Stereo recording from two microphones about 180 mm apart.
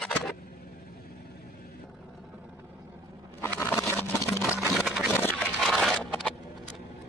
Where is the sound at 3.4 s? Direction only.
15° left (ahead or behind).